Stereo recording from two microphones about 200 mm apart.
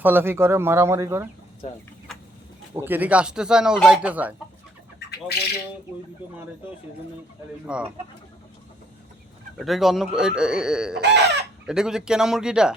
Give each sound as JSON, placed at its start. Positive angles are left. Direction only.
{"t": 0.0, "sound": "speech", "side_deg": -10}
{"t": 2.1, "sound": "a sound", "side_deg": 0}
{"t": 2.7, "sound": "speech", "side_deg": -10}
{"t": 7.7, "sound": "speech", "side_deg": -5}
{"t": 9.6, "sound": "speech", "side_deg": 0}
{"t": 11.0, "sound": "chicken", "side_deg": -60}
{"t": 11.6, "sound": "speech", "side_deg": -5}